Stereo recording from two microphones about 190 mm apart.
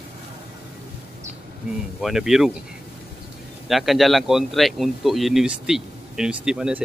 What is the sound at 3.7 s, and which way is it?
Speech, centre (ahead or behind).